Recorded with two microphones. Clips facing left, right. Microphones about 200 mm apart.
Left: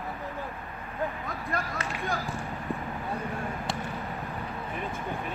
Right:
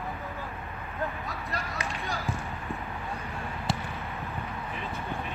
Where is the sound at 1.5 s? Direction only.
50° left (ahead or behind).